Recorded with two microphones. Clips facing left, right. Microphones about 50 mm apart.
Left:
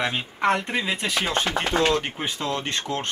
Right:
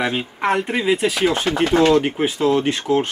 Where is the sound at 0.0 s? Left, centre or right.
Centre.